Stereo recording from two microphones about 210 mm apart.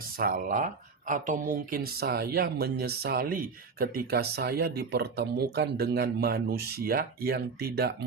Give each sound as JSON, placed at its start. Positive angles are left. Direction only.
{"t": 0.2, "sound": "speech", "side_deg": -45}